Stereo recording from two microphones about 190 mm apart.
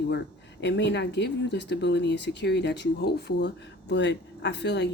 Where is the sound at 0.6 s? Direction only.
65° left (ahead or behind).